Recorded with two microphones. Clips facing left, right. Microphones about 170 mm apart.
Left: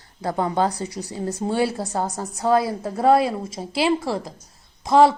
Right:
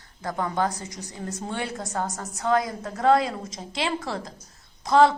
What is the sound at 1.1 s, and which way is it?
A woman's voice, 30° left (ahead or behind).